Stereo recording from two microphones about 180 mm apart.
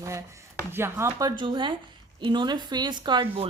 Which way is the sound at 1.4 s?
25° right (ahead or behind).